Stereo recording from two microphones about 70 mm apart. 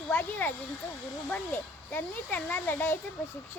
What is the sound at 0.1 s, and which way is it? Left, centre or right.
Speech, left.